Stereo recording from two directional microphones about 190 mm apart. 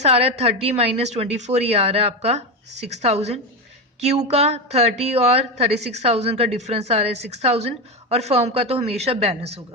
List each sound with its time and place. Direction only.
0.0 s a woman's voice: 35° right (ahead or behind)